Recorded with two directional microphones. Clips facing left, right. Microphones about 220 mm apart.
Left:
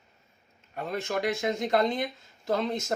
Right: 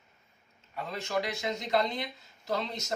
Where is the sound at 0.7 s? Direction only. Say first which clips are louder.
Left 2 dB; 50° left (ahead or behind).